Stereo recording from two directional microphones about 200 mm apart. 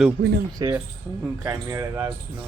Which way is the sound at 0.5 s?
15° right (ahead or behind).